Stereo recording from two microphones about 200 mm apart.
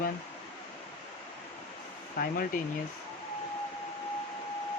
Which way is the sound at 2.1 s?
45° left (ahead or behind).